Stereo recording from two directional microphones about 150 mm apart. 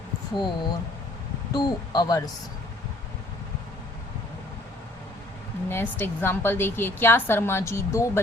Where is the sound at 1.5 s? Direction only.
30° left (ahead or behind).